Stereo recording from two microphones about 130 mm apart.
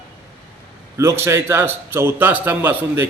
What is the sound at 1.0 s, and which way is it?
A man's voice, 20° right (ahead or behind).